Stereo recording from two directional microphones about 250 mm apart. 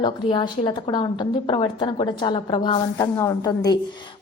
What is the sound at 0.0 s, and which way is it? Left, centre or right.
A woman's voice, centre.